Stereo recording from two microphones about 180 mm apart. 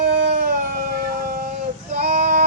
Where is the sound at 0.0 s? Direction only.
50° right (ahead or behind).